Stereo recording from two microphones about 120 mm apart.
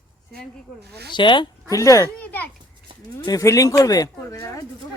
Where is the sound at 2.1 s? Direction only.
15° left (ahead or behind).